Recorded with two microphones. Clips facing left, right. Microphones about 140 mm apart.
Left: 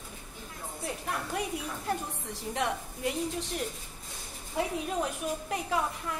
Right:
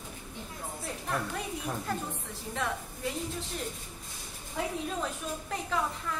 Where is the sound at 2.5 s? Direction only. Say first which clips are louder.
Left 2 dB; 20° left (ahead or behind).